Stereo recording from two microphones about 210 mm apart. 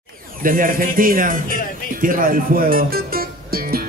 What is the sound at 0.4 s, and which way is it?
Speech, 40° right (ahead or behind).